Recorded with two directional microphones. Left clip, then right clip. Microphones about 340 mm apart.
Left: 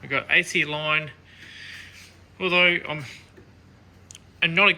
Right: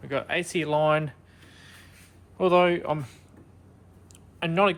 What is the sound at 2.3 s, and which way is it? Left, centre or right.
Speech, centre.